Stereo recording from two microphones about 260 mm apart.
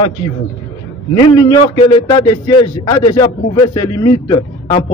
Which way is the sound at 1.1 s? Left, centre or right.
Centre.